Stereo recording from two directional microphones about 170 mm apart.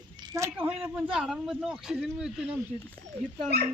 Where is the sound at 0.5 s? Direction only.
10° right (ahead or behind).